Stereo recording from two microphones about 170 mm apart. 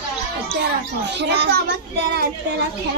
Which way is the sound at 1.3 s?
85° right.